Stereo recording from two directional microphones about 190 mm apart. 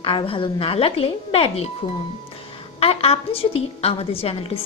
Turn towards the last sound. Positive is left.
turn(degrees=30)  # may be behind; listen again after turning